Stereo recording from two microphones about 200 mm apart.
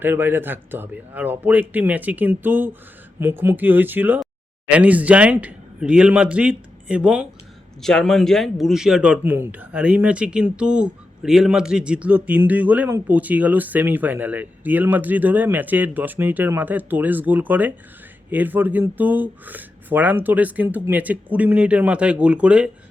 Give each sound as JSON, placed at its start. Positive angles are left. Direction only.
{"t": 0.0, "sound": "a man's voice", "side_deg": -10}